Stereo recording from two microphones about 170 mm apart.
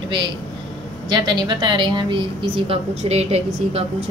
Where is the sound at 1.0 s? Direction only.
25° right (ahead or behind).